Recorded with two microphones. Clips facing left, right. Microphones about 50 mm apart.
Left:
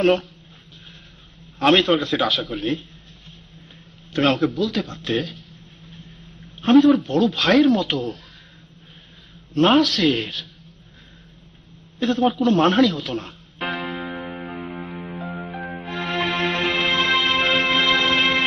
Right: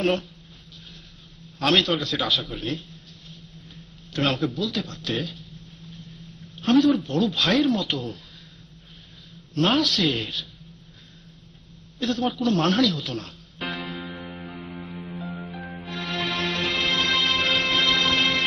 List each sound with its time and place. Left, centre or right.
0.0 s speech: centre
1.6 s a man's voice: left
2.2 s speech: centre
4.2 s speech: centre
6.6 s speech: left
6.9 s speech: centre
9.5 s a man's voice: left
9.8 s speech: centre
12.0 s a man's voice: left
12.8 s music: left